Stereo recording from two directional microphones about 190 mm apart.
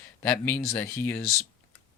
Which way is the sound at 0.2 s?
10° left (ahead or behind).